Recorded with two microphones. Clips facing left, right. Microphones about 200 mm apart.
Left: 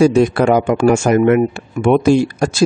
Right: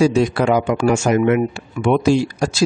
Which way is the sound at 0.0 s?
55° left (ahead or behind).